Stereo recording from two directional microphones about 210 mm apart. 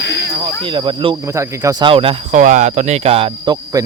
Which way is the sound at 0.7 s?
25° right (ahead or behind).